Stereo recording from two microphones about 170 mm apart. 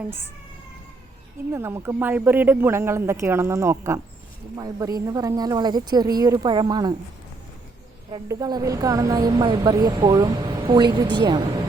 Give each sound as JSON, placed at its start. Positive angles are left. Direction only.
{"t": 1.5, "sound": "speech", "side_deg": -15}
{"t": 8.1, "sound": "speech", "side_deg": -20}